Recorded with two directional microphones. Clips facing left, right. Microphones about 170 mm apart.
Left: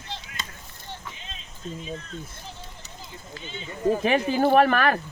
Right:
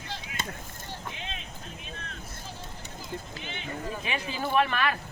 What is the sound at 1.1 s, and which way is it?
Music, 70° right (ahead or behind).